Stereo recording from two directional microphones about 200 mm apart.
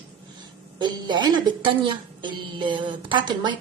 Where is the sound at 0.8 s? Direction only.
20° right (ahead or behind).